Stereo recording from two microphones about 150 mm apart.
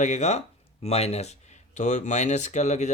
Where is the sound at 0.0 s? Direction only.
50° left (ahead or behind).